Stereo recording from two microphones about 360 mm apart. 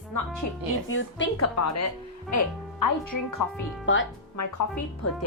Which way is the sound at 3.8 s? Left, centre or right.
Left.